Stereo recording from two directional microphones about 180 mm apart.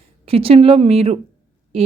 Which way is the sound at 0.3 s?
30° right (ahead or behind).